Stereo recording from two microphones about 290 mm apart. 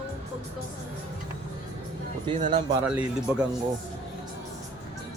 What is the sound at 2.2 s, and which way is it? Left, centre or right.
Speech, right.